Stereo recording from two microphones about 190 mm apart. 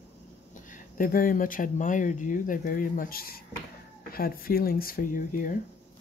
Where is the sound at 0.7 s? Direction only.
45° left (ahead or behind).